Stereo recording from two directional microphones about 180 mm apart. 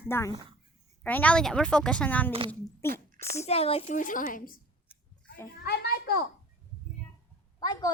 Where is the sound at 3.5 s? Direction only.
35° left (ahead or behind).